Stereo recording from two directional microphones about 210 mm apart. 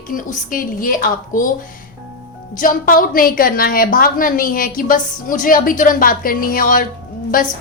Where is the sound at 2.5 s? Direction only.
40° left (ahead or behind).